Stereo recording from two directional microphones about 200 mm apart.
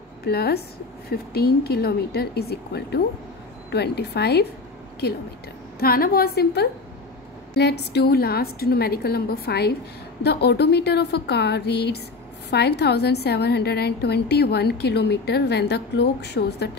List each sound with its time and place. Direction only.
0.2 s a woman's voice: 50° left (ahead or behind)
5.8 s a woman's voice: 50° left (ahead or behind)